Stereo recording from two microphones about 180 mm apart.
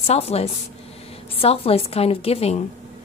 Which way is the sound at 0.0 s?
35° left (ahead or behind).